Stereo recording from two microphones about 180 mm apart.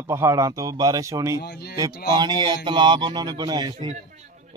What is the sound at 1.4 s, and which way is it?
Speech, 60° left (ahead or behind).